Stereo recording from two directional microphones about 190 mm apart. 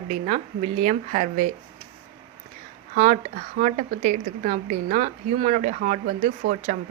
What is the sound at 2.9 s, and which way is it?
A woman's voice, 45° right (ahead or behind).